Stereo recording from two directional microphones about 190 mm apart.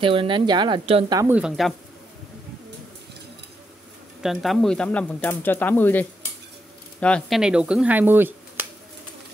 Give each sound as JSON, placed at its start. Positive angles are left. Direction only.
{"t": 0.0, "sound": "speech", "side_deg": -25}
{"t": 1.3, "sound": "speech", "side_deg": -5}
{"t": 4.2, "sound": "speech", "side_deg": 0}